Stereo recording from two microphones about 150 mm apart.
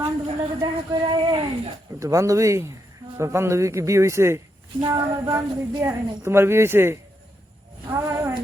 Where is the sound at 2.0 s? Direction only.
20° right (ahead or behind).